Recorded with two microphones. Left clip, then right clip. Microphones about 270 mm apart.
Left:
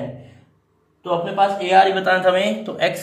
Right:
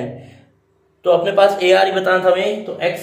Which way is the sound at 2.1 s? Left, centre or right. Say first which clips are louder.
Right 2 dB; centre.